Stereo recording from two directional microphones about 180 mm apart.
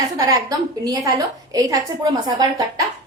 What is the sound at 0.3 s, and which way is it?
A woman's voice, 20° right (ahead or behind).